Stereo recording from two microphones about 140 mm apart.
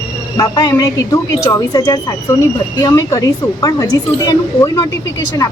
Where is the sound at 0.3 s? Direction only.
30° left (ahead or behind).